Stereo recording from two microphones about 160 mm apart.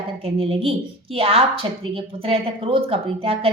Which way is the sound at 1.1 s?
35° right (ahead or behind).